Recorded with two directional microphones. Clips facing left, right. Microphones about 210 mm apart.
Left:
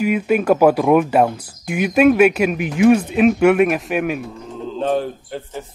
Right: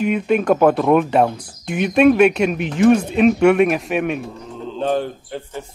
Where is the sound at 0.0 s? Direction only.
5° left (ahead or behind).